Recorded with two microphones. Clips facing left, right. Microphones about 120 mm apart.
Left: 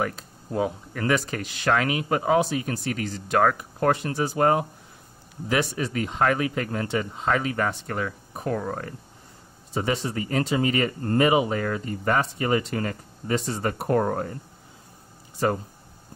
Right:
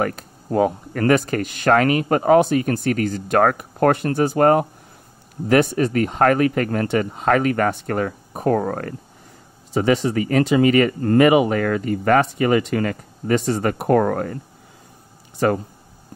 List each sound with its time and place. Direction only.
0.0 s speech: 55° right (ahead or behind)
9.8 s speech: 90° right